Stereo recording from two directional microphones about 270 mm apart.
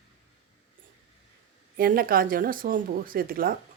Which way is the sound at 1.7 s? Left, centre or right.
Right.